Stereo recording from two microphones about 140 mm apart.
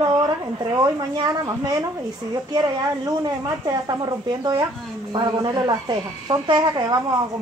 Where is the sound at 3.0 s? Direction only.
30° right (ahead or behind).